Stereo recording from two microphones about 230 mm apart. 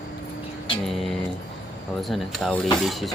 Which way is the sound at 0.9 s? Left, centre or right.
Centre.